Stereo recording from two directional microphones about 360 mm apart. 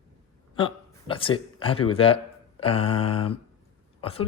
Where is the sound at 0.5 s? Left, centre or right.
Centre.